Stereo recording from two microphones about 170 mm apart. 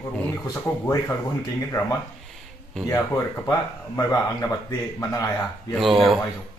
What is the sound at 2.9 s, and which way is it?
A man's voice, 15° left (ahead or behind).